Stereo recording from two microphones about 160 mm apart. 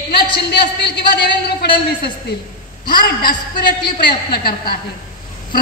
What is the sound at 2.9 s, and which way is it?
A woman's voice, 65° left (ahead or behind).